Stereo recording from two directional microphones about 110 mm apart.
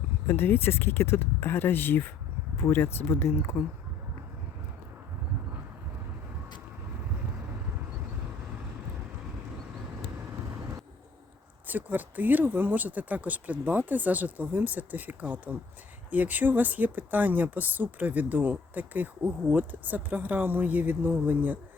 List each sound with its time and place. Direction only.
0.3 s speech: 20° left (ahead or behind)
11.7 s speech: 15° right (ahead or behind)